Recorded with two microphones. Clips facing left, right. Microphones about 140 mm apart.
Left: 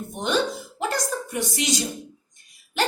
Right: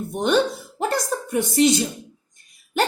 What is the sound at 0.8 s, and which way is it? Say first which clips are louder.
Speech: right 3 dB; 45° right (ahead or behind).